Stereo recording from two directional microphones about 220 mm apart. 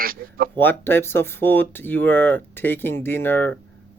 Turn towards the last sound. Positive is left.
turn(degrees=10)  # may be behind; listen again after turning